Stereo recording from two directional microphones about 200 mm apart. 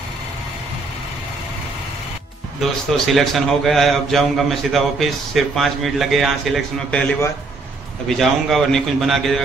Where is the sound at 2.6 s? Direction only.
Centre (ahead or behind).